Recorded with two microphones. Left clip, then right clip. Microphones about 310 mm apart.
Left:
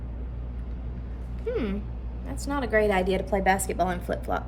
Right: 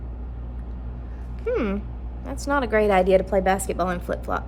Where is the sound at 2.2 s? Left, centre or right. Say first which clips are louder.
Right 7 dB; centre.